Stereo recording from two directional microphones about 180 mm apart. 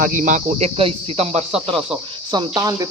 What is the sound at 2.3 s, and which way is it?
Speech, 25° right (ahead or behind).